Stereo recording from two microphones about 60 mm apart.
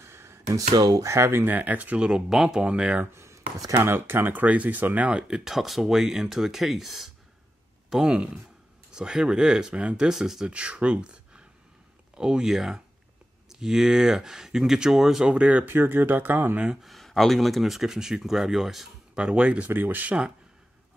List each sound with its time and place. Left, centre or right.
0.0 s a sound: right
0.6 s speech: right
1.0 s speech: right
1.4 s speech: right; by 2.6 s centre
2.6 s speech: centre
3.0 s speech: right
3.8 s speech: right
5.3 s speech: centre
10.5 s speech: centre
15.3 s speech: right
15.6 s speech: right
16.8 s speech: centre
19.1 s speech: centre
19.7 s speech: right